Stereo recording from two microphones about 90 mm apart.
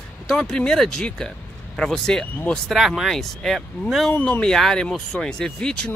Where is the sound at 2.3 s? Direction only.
20° left (ahead or behind).